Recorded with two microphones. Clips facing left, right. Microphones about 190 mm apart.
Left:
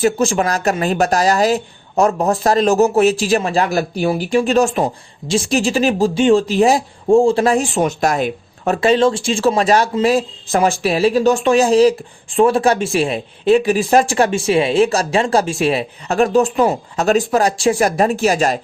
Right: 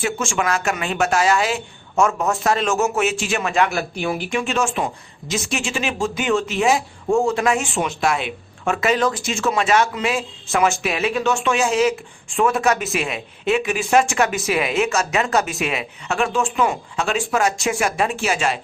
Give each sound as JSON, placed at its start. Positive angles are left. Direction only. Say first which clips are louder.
{"t": 0.0, "sound": "speech", "louder": "left 7 dB", "side_deg": 35}